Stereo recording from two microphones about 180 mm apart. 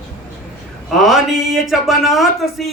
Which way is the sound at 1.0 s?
Centre (ahead or behind).